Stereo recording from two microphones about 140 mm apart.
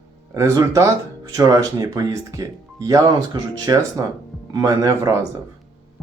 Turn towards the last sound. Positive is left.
turn(degrees=-25)  # may be behind; listen again after turning